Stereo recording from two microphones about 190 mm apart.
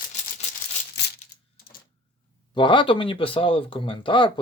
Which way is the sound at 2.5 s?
25° left (ahead or behind).